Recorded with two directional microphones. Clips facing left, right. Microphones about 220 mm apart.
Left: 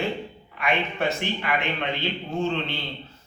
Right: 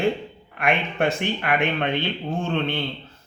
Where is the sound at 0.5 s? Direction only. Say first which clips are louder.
Right 3 dB; 55° right (ahead or behind).